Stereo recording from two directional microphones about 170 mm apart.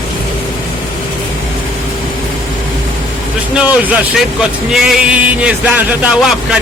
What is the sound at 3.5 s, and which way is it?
Speech, 5° right (ahead or behind).